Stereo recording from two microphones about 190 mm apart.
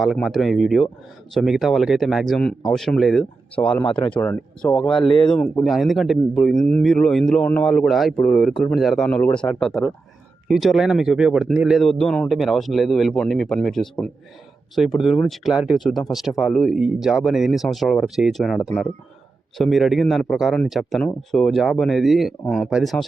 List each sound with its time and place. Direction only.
0.0 s speech: centre (ahead or behind)
4.8 s speech: 25° left (ahead or behind)
5.4 s speech: centre (ahead or behind)